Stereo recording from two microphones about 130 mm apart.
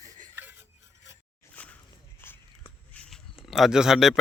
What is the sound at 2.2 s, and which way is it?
Walk, 20° left (ahead or behind).